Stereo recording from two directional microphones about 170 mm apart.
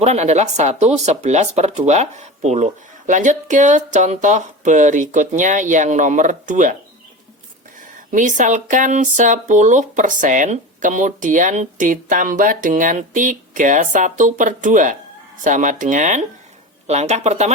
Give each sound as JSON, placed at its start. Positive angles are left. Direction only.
{"t": 0.0, "sound": "speech", "side_deg": -40}
{"t": 8.1, "sound": "speech", "side_deg": -50}